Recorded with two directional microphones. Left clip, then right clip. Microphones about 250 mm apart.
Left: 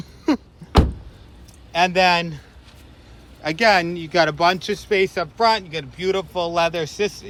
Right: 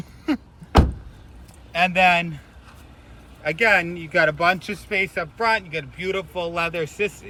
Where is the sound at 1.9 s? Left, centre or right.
Left.